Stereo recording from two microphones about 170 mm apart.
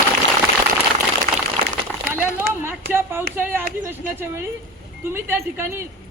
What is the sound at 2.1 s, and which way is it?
A woman's voice, 10° right (ahead or behind).